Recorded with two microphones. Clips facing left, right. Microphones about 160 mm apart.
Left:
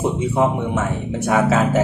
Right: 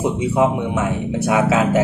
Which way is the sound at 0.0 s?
10° right (ahead or behind).